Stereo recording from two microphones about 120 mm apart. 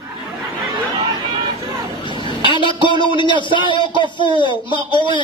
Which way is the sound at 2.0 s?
40° left (ahead or behind).